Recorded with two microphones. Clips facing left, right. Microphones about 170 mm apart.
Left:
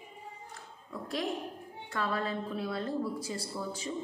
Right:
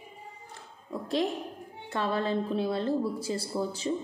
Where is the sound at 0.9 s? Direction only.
25° right (ahead or behind).